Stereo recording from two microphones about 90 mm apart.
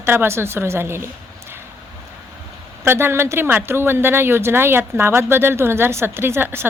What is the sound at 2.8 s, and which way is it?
A woman's voice, 25° right (ahead or behind).